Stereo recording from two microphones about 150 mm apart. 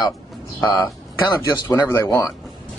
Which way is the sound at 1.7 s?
20° left (ahead or behind).